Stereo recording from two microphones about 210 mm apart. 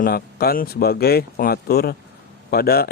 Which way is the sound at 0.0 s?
45° left (ahead or behind).